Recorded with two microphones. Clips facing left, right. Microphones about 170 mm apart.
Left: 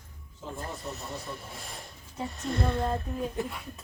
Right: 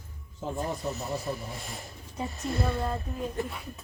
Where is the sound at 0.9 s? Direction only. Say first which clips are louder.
Right 5 dB; 5° right (ahead or behind).